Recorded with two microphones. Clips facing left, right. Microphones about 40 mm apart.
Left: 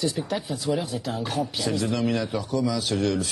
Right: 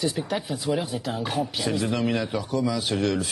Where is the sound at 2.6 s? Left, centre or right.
Right.